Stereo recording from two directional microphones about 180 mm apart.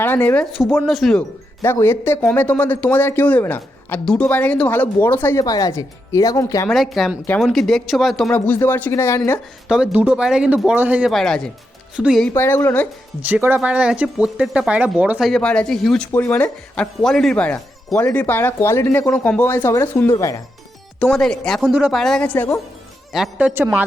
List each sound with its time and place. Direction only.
0.0 s speech: 10° left (ahead or behind)
1.6 s a man's voice: 10° left (ahead or behind)
6.7 s speech: centre (ahead or behind)
8.4 s a man's voice: 10° left (ahead or behind)
9.6 s speech: 5° right (ahead or behind)
12.3 s a man's voice: 15° left (ahead or behind)
13.2 s a man's voice: 10° right (ahead or behind); by 20.4 s 20° left (ahead or behind)
21.0 s speech: 5° left (ahead or behind)
23.1 s speech: 5° right (ahead or behind)